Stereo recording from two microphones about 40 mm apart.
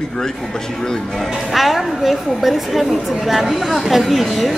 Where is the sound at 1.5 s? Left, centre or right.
Centre.